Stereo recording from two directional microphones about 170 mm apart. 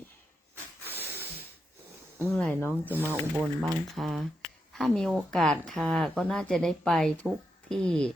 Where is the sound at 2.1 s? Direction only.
5° left (ahead or behind).